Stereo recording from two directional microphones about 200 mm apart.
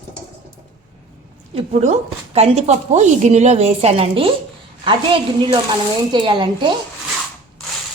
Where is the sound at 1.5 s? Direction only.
30° right (ahead or behind).